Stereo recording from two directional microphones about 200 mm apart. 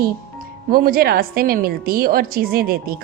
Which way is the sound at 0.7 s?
45° right (ahead or behind).